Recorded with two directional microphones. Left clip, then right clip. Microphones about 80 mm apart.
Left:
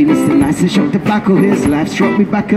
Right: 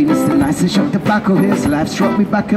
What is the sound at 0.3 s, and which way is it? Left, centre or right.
Speech, left.